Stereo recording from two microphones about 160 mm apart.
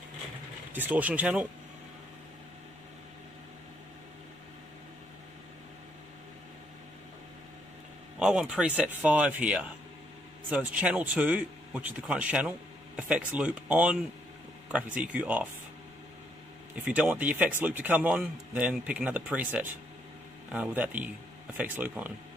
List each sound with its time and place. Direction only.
0.7 s a man's voice: 10° right (ahead or behind)
8.2 s a man's voice: 5° right (ahead or behind)
15.0 s a man's voice: 10° right (ahead or behind)
16.8 s a man's voice: 10° right (ahead or behind)